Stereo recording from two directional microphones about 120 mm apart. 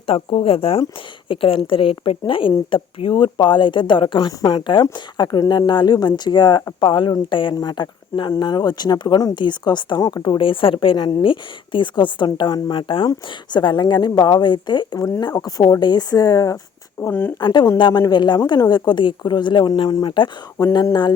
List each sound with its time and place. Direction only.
0.1 s speech: 50° left (ahead or behind)
4.3 s speech: 35° left (ahead or behind)
17.0 s speech: 20° left (ahead or behind)
17.4 s speech: 40° left (ahead or behind)